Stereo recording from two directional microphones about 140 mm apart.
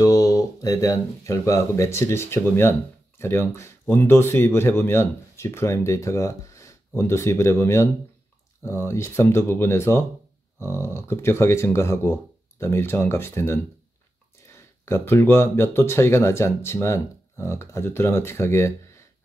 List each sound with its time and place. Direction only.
0.0 s speech: 25° left (ahead or behind)